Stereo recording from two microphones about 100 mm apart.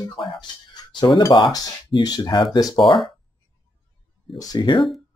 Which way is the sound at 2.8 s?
60° left (ahead or behind).